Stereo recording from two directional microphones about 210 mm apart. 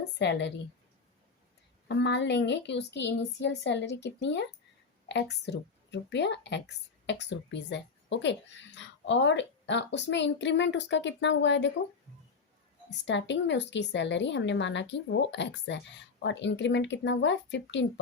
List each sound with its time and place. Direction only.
0.2 s speech: 55° left (ahead or behind)
1.9 s speech: 55° left (ahead or behind)
13.1 s speech: 60° left (ahead or behind)